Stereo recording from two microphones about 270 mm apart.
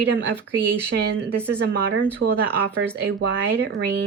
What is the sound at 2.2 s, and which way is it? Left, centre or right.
Speech, right.